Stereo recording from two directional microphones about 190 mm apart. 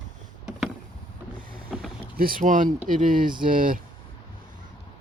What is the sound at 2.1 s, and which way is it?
Speech, 50° right (ahead or behind).